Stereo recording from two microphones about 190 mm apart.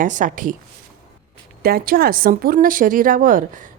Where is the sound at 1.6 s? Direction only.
50° right (ahead or behind).